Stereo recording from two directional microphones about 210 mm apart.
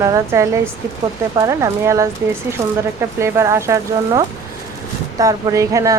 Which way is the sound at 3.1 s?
15° right (ahead or behind).